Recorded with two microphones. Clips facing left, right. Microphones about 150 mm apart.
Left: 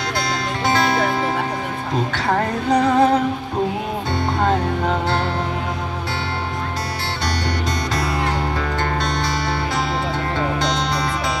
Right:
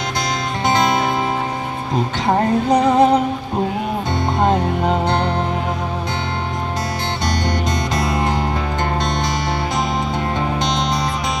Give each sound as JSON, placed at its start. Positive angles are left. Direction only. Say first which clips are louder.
{"t": 0.7, "sound": "music", "louder": "right 1 dB", "side_deg": -20}
{"t": 2.2, "sound": "music", "louder": "right 5 dB", "side_deg": -20}
{"t": 4.4, "sound": "music", "louder": "right 3 dB", "side_deg": -20}
{"t": 7.9, "sound": "music", "louder": "right 2 dB", "side_deg": -20}
{"t": 10.6, "sound": "music", "louder": "right 1 dB", "side_deg": -20}